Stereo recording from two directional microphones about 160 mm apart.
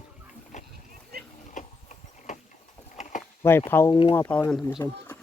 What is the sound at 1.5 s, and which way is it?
Horse, 50° left (ahead or behind).